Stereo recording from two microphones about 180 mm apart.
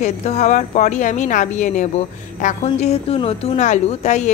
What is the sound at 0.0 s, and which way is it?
A woman's voice, 40° left (ahead or behind).